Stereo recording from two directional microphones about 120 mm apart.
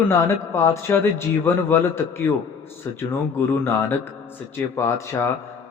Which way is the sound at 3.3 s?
15° left (ahead or behind).